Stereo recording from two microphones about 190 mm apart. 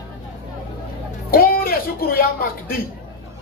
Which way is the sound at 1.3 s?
50° left (ahead or behind).